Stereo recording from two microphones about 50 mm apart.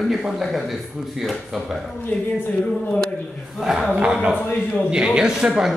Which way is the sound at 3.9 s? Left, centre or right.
Right.